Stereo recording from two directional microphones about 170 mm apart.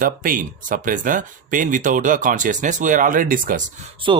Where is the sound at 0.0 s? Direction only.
55° right (ahead or behind).